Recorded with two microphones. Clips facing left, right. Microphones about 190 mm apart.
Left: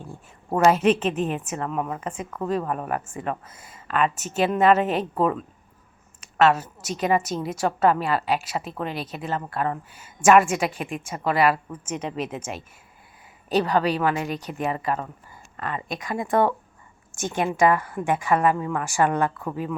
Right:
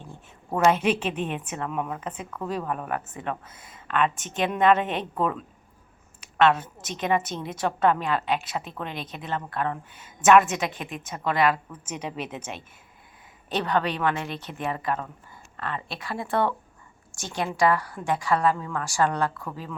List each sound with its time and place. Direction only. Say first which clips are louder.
0.0 s a woman's voice: left 4 dB; 10° left (ahead or behind)
6.3 s a woman's voice: left 2 dB; 5° left (ahead or behind)
11.9 s a woman's voice: left 4 dB; 5° right (ahead or behind); by 19.7 s 15° left (ahead or behind)